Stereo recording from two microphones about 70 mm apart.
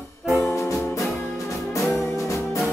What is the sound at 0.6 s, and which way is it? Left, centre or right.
Music, left.